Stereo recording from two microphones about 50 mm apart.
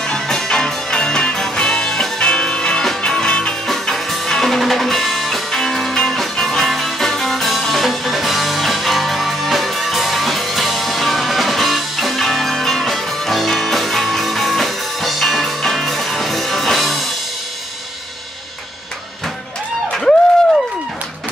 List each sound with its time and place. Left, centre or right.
0.0 s music: centre
3.6 s music: centre
19.9 s a sound: centre